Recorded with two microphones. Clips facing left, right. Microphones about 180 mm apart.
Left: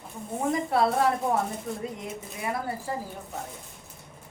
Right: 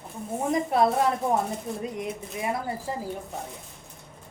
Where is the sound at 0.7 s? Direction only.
20° right (ahead or behind).